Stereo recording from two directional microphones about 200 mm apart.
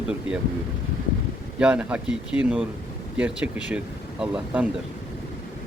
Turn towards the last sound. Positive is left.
turn(degrees=-5)  # may be behind; listen again after turning